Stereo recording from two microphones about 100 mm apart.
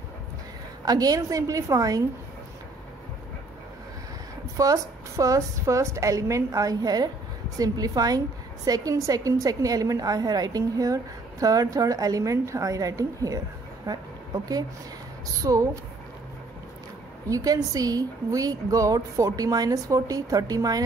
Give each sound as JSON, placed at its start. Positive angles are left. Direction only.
{"t": 0.8, "sound": "a woman's voice", "side_deg": -40}
{"t": 4.6, "sound": "a woman's voice", "side_deg": -35}
{"t": 17.3, "sound": "a woman's voice", "side_deg": -35}